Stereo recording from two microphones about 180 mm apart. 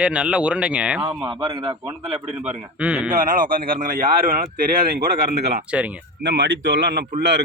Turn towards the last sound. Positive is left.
turn(degrees=-70)  # may be behind; listen again after turning